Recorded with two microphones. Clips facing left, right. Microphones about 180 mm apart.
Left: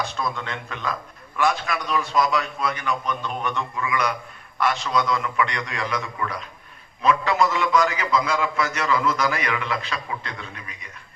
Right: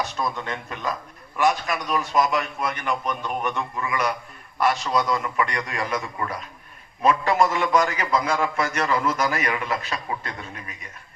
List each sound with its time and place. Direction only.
0.2 s a man's voice: 15° right (ahead or behind)
2.6 s a man's voice: 50° right (ahead or behind)
3.0 s a man's voice: 15° right (ahead or behind)
4.6 s a man's voice: 40° right (ahead or behind)